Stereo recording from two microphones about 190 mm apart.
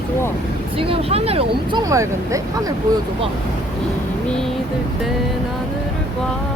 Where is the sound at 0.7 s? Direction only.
30° right (ahead or behind).